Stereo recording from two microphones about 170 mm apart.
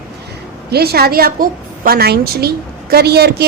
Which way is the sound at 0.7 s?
70° right (ahead or behind).